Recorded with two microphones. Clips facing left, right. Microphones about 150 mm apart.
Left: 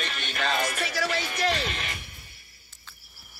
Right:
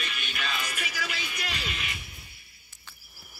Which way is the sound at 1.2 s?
45° left (ahead or behind).